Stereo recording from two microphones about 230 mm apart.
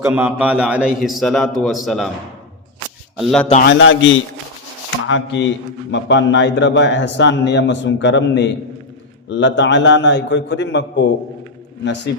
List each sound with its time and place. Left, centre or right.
0.0 s a man's voice: centre
3.2 s a man's voice: centre
3.7 s a man's voice: left